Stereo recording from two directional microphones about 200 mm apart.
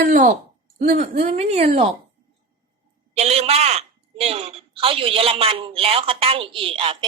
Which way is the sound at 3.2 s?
30° right (ahead or behind).